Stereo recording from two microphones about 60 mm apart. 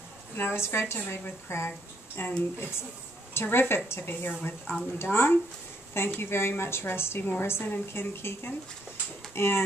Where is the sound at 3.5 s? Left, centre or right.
Left.